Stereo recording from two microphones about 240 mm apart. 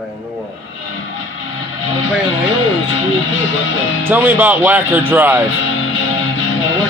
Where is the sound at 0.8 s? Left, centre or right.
Left.